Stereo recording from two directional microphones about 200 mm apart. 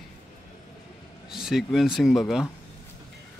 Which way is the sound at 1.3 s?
Centre (ahead or behind).